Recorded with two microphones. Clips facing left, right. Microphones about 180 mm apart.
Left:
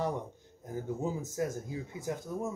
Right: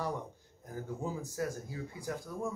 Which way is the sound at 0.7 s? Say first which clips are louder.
Left 4 dB; 20° left (ahead or behind).